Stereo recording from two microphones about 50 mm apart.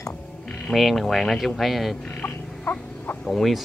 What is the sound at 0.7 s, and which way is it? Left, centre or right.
Speech, centre.